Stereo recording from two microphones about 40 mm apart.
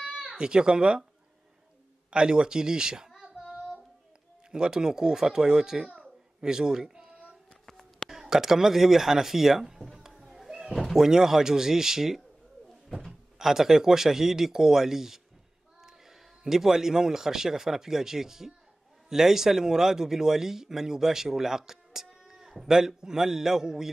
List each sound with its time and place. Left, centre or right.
0.3 s speech: centre
2.0 s speech: right
3.1 s female singing: centre
4.5 s a man's voice: centre
5.9 s a sound: centre
8.1 s speech: centre
13.4 s a man's voice: centre